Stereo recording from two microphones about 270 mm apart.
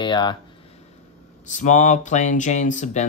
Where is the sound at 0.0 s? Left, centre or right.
Centre.